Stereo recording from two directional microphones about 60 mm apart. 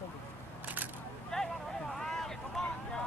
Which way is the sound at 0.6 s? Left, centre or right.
Right.